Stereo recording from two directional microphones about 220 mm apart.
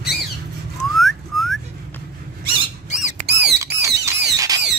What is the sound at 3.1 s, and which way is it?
Squawk, 50° right (ahead or behind).